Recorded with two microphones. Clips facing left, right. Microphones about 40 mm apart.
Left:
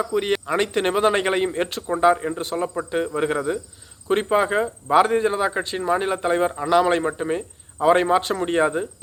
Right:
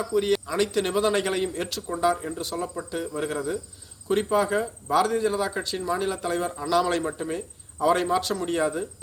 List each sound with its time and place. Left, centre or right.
0.0 s a man's voice: left